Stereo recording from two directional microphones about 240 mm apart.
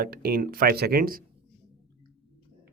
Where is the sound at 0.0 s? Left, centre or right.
Right.